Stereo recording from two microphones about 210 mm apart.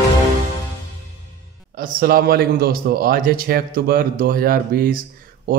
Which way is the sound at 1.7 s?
45° right (ahead or behind).